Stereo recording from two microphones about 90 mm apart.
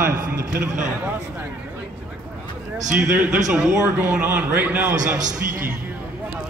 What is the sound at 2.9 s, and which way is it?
A man's voice, 15° right (ahead or behind).